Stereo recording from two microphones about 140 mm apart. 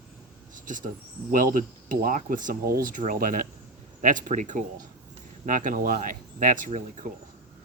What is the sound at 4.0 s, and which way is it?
Speech, 65° right (ahead or behind).